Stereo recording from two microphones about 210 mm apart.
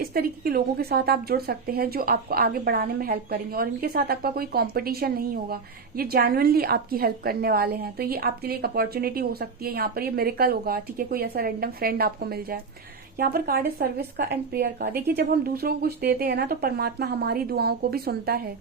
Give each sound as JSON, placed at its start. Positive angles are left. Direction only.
{"t": 0.0, "sound": "a woman's voice", "side_deg": -45}